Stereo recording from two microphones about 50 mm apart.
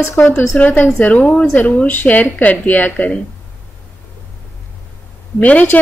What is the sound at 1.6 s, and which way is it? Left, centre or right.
Speech, left.